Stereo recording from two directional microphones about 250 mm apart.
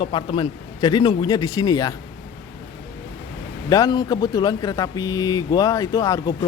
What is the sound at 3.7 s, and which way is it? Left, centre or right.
Speech, centre.